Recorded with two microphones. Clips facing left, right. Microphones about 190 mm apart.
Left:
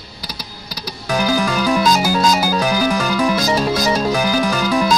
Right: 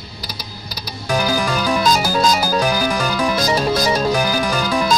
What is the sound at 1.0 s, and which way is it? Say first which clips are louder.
Music: left 1 dB; 5° left (ahead or behind).